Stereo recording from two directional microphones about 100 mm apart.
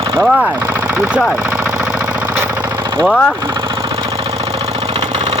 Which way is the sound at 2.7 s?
45° right (ahead or behind).